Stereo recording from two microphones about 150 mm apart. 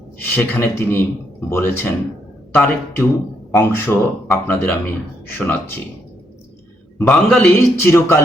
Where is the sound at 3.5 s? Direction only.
15° left (ahead or behind).